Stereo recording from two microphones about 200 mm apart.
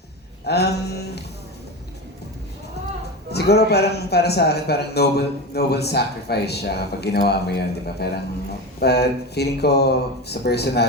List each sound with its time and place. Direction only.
0.4 s speech: 55° left (ahead or behind)
3.3 s a man's voice: 55° left (ahead or behind)